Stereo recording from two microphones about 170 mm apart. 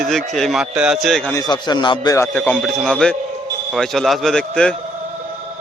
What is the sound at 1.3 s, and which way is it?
Speech, 20° left (ahead or behind).